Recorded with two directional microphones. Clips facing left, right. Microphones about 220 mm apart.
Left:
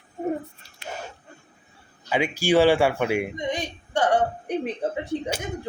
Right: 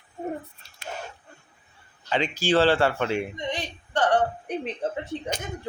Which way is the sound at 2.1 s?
10° left (ahead or behind).